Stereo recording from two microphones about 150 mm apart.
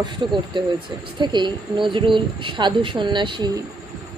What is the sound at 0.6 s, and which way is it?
A man's voice, 30° right (ahead or behind).